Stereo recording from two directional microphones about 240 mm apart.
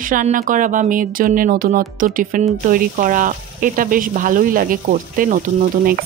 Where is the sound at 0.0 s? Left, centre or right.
Right.